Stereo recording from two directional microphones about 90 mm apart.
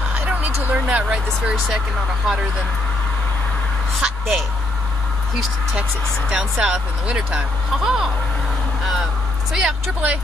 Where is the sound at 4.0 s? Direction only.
Centre (ahead or behind).